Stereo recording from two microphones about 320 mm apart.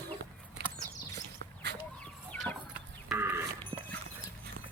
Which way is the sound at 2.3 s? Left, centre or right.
Centre.